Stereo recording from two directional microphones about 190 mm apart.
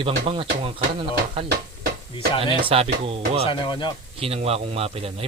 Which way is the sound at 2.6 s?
30° right (ahead or behind).